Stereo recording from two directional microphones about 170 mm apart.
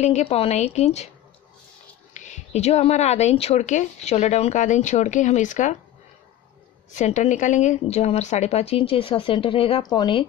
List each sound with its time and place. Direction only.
0.0 s speech: 40° left (ahead or behind)
2.1 s speech: 45° left (ahead or behind)
6.9 s speech: 45° left (ahead or behind); by 10.2 s 25° left (ahead or behind)